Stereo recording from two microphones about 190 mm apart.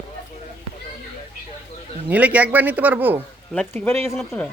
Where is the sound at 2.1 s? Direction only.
10° right (ahead or behind).